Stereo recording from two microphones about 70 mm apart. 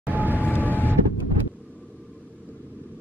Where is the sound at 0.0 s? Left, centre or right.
Right.